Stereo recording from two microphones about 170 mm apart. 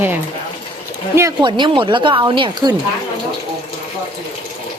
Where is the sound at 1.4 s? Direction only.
30° right (ahead or behind).